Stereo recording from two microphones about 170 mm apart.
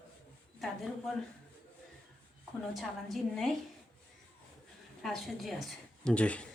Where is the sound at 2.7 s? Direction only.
Centre (ahead or behind).